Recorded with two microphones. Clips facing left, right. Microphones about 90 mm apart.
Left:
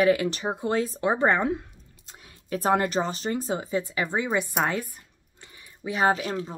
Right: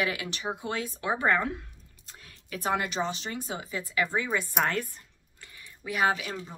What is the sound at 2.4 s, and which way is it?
Speech, 40° left (ahead or behind).